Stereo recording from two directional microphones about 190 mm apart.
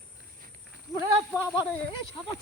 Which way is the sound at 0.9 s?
20° left (ahead or behind).